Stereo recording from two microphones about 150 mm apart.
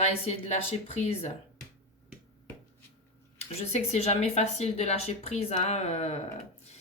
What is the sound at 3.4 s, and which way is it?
Speech, 45° left (ahead or behind).